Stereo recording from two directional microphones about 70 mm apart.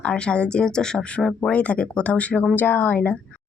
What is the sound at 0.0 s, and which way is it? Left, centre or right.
Speech, centre.